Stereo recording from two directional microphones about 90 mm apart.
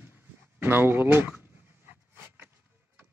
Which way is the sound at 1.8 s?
25° right (ahead or behind).